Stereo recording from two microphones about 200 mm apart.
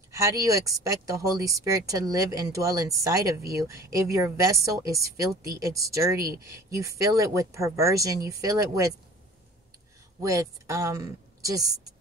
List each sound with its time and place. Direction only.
0.1 s speech: 15° right (ahead or behind)
10.2 s a woman's voice: 15° right (ahead or behind)